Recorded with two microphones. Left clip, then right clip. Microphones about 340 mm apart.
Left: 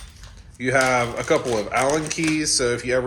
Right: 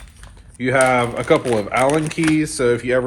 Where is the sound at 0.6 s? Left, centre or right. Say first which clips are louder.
Right 4 dB; right.